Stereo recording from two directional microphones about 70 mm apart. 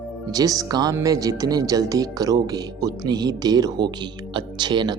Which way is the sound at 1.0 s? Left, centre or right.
Right.